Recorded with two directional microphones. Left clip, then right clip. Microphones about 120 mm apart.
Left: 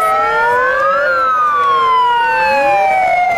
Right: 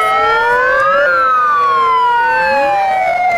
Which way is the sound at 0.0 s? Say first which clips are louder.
Right 1 dB; 25° right (ahead or behind).